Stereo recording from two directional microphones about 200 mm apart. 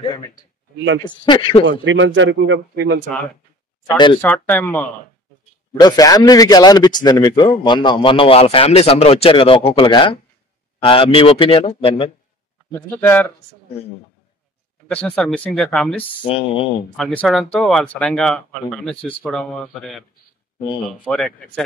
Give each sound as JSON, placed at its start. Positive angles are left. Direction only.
{"t": 0.0, "sound": "a man's voice", "side_deg": 20}
{"t": 1.7, "sound": "speech", "side_deg": -70}
{"t": 3.9, "sound": "a man's voice", "side_deg": 25}
{"t": 4.2, "sound": "a man's voice", "side_deg": 10}
{"t": 12.7, "sound": "speech", "side_deg": 10}
{"t": 14.9, "sound": "speech", "side_deg": 5}
{"t": 16.3, "sound": "a man's voice", "side_deg": 30}
{"t": 16.9, "sound": "speech", "side_deg": 5}